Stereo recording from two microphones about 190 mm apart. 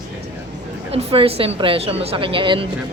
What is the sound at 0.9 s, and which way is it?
A woman's voice, 30° right (ahead or behind).